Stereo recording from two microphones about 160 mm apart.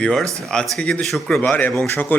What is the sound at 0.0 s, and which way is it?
Speech, centre (ahead or behind).